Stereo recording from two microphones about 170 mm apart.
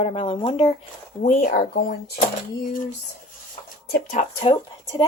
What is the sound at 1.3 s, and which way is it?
Speech, 45° left (ahead or behind).